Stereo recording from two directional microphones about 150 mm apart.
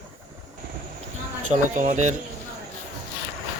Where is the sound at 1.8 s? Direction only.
55° right (ahead or behind).